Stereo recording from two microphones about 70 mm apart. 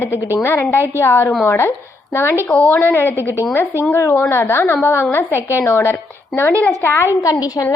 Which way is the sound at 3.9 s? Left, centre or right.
Left.